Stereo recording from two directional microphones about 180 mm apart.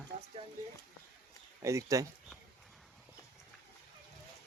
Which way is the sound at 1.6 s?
15° right (ahead or behind).